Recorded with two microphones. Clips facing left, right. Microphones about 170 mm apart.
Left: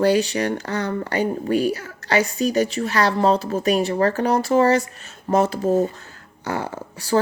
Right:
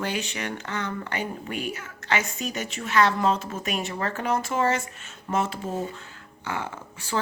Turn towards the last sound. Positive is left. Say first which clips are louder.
# left 9 dB
turn(degrees=40)  # may be behind; listen again after turning